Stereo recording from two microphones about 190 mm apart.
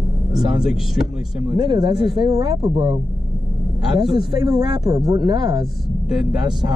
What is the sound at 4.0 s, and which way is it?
Speech, 25° right (ahead or behind).